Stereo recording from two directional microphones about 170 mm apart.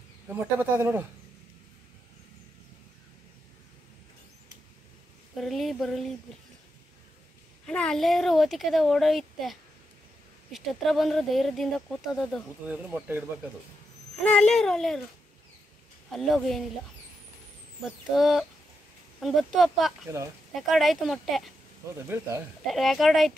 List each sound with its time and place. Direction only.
0.3 s speech: 10° right (ahead or behind)
5.4 s speech: centre (ahead or behind)
7.6 s speech: 5° left (ahead or behind)
12.6 s speech: 10° right (ahead or behind)
14.2 s speech: 5° left (ahead or behind)
16.1 s speech: centre (ahead or behind)
18.1 s speech: centre (ahead or behind)
21.9 s speech: 15° right (ahead or behind)
22.7 s speech: centre (ahead or behind)